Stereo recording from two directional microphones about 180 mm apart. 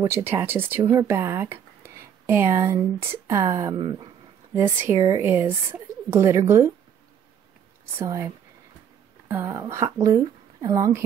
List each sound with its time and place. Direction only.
0.0 s speech: 15° right (ahead or behind)
4.6 s speech: 15° right (ahead or behind)
8.0 s speech: 20° right (ahead or behind)
9.3 s speech: 15° right (ahead or behind)